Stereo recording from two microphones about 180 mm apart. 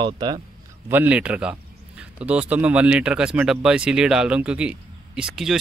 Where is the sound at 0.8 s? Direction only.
10° right (ahead or behind).